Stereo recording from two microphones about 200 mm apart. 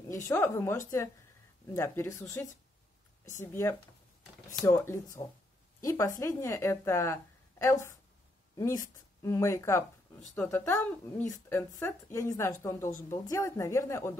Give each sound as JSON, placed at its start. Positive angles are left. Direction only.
{"t": 0.3, "sound": "a woman's voice", "side_deg": 15}